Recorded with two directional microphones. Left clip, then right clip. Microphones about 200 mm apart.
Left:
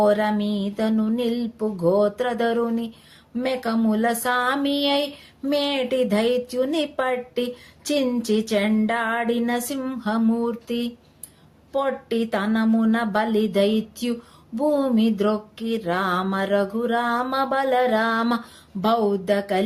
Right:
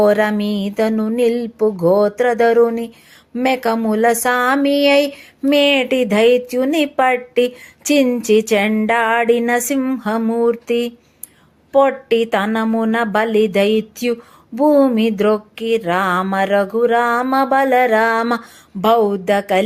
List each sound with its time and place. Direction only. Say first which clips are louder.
0.0 s speech: right 6 dB; 35° right (ahead or behind)